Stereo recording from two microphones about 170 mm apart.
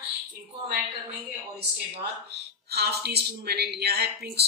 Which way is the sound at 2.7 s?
70° right (ahead or behind).